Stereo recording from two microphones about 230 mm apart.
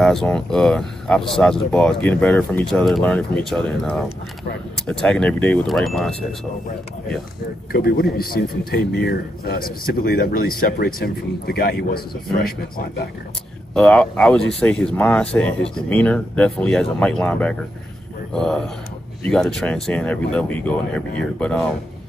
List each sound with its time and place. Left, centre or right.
0.0 s speech: centre
7.7 s a man's voice: left
13.7 s speech: centre